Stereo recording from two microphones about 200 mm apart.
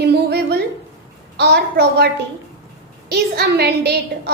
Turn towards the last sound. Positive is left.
turn(degrees=-50)  # may be behind; listen again after turning